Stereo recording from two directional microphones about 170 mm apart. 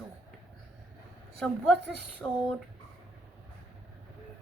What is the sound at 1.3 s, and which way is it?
A woman's voice, centre (ahead or behind).